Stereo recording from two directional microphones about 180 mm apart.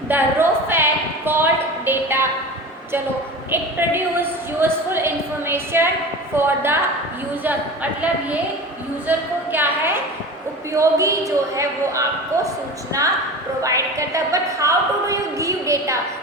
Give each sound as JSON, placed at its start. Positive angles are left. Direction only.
{"t": 0.1, "sound": "a sound", "side_deg": -10}
{"t": 3.5, "sound": "a woman's voice", "side_deg": -10}
{"t": 13.6, "sound": "a woman's voice", "side_deg": -15}